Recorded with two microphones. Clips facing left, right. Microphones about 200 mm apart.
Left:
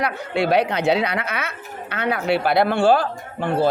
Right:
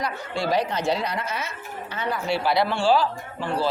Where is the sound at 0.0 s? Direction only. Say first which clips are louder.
Left 5 dB; 65° left (ahead or behind).